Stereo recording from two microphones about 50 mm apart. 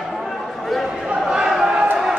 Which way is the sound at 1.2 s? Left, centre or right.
Centre.